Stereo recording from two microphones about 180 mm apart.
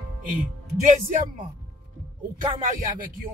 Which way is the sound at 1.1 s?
50° right (ahead or behind).